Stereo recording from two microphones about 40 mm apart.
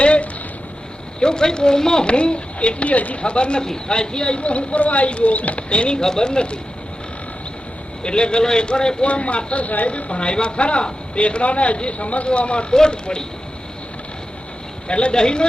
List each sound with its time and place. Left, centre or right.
0.0 s a sound: left
1.2 s speech: centre; by 3.2 s left
3.2 s speech: left
6.0 s speech: centre
8.0 s speech: left
9.0 s speech: left
12.7 s speech: centre
14.8 s speech: left